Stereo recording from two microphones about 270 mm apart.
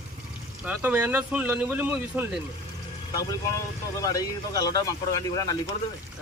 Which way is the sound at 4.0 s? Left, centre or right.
Centre.